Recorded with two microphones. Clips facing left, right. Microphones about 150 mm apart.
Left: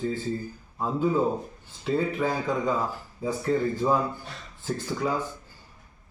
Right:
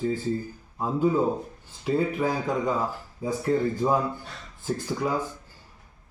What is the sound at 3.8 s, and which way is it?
Speech, 15° right (ahead or behind).